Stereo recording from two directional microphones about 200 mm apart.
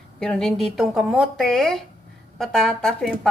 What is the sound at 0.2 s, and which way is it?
Speech, centre (ahead or behind).